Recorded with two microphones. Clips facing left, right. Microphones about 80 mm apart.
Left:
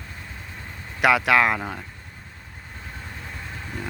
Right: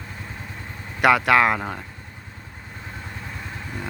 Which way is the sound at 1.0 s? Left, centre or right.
Centre.